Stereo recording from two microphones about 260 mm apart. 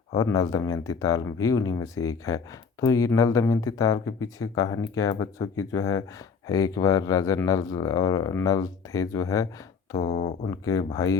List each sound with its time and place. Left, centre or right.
0.1 s speech: centre
10.0 s speech: left
10.6 s speech: centre